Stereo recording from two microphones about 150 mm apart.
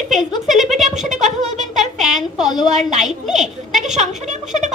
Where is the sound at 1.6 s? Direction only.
Centre (ahead or behind).